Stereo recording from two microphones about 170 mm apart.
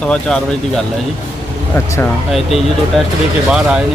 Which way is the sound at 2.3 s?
Centre (ahead or behind).